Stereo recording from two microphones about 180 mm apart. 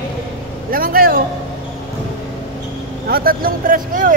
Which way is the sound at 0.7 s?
55° right (ahead or behind).